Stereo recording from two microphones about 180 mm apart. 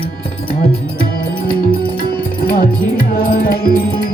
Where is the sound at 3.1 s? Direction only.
55° left (ahead or behind).